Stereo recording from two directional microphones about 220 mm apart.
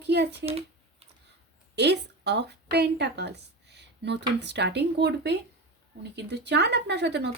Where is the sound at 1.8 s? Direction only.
50° right (ahead or behind).